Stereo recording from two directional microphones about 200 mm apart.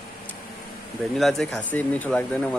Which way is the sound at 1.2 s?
Centre (ahead or behind).